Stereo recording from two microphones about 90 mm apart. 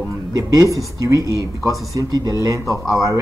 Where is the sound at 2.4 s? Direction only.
40° right (ahead or behind).